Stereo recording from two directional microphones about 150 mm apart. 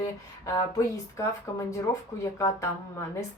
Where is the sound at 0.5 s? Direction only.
20° left (ahead or behind).